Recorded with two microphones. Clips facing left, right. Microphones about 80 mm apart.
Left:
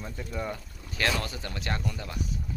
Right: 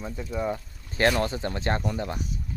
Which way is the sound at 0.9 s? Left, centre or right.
Right.